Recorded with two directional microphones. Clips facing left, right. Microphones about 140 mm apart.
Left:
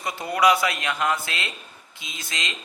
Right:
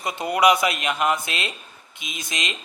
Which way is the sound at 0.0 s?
20° right (ahead or behind).